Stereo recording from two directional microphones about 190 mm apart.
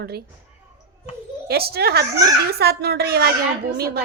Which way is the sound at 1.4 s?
55° right (ahead or behind).